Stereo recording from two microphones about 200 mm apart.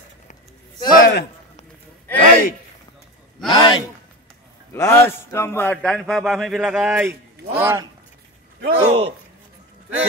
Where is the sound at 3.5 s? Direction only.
20° left (ahead or behind); by 7.9 s 10° right (ahead or behind).